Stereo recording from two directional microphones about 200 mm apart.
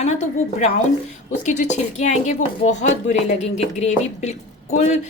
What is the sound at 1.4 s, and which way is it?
Speech, 35° left (ahead or behind).